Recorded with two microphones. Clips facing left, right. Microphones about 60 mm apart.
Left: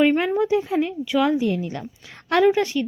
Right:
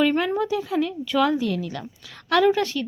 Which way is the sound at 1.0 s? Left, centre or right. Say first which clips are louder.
Left 1 dB; centre.